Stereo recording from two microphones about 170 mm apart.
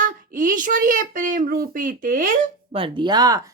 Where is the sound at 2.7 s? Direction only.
30° right (ahead or behind).